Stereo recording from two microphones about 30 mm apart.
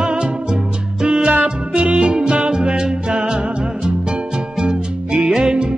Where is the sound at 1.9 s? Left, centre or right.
Right.